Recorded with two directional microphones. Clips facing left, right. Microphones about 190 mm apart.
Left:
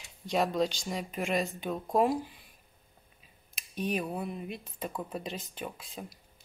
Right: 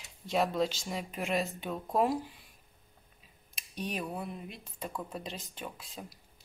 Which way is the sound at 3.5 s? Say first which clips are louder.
Left 5 dB; centre (ahead or behind).